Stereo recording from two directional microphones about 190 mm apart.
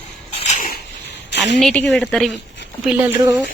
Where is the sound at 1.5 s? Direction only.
5° left (ahead or behind).